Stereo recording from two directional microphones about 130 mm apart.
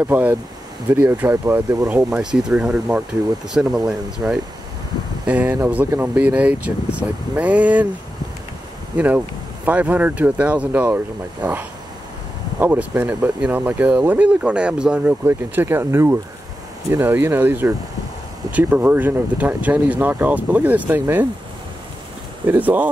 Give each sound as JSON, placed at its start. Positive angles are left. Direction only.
{"t": 0.0, "sound": "speech", "side_deg": -15}
{"t": 1.9, "sound": "speech", "side_deg": -10}
{"t": 8.9, "sound": "speech", "side_deg": -10}
{"t": 12.5, "sound": "speech", "side_deg": -15}
{"t": 22.5, "sound": "speech", "side_deg": -15}